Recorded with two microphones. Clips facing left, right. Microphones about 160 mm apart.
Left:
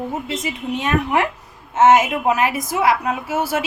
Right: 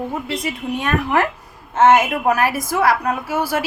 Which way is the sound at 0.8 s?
20° left (ahead or behind).